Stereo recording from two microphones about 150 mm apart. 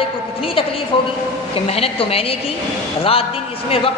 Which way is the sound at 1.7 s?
40° left (ahead or behind).